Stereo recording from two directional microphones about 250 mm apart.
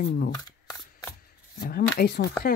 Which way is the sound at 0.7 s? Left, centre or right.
Centre.